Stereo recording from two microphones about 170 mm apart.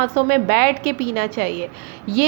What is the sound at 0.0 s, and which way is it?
A woman's voice, 60° right (ahead or behind).